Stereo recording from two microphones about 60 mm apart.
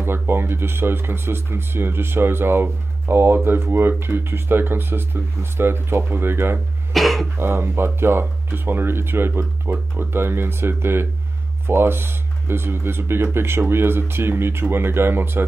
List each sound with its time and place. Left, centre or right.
0.0 s speech: right
6.9 s cough: centre
7.3 s speech: right